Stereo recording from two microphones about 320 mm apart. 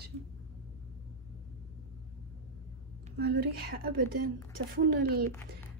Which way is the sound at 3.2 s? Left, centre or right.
Right.